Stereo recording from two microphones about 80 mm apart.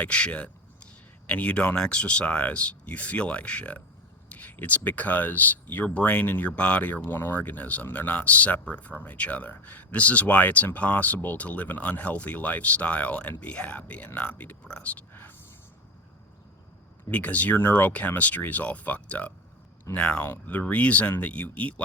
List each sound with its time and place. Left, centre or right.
0.0 s speech: centre
17.1 s speech: centre